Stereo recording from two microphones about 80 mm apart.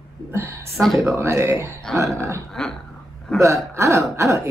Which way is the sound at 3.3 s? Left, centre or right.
Right.